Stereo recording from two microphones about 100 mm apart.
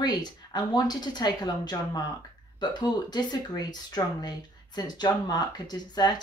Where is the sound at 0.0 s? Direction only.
45° left (ahead or behind).